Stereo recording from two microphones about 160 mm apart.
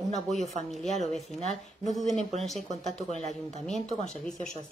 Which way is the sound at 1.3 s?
45° right (ahead or behind).